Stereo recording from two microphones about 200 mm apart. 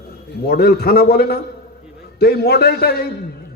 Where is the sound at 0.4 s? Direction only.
50° left (ahead or behind).